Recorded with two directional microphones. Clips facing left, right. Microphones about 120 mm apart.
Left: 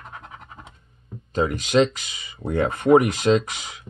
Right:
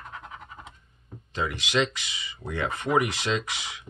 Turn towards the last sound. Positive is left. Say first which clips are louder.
# left 8 dB
turn(degrees=40)  # may be behind; listen again after turning